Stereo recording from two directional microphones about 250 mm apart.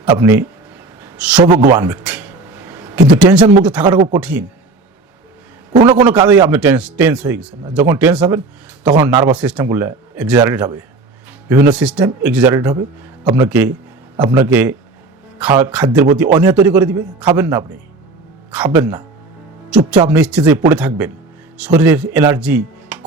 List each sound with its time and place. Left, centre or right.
0.1 s a man's voice: centre
1.7 s a sound: centre
3.2 s speech: centre
3.8 s a man's voice: centre
4.2 s speech: centre
5.8 s a man's voice: centre